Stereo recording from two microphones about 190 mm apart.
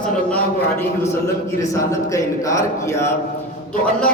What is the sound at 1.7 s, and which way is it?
A man's voice, 15° left (ahead or behind).